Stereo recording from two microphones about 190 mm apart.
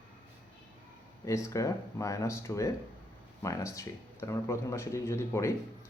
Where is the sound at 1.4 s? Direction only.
15° left (ahead or behind).